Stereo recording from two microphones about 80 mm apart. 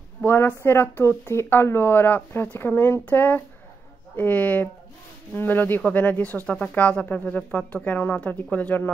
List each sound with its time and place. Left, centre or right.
0.2 s speech: left
6.4 s speech: centre